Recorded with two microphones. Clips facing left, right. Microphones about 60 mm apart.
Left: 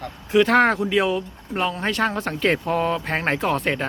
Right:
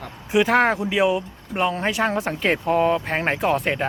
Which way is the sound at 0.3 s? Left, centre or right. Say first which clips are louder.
Left 1 dB; centre.